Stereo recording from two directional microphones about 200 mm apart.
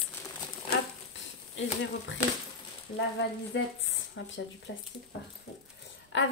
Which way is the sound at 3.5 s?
65° left (ahead or behind).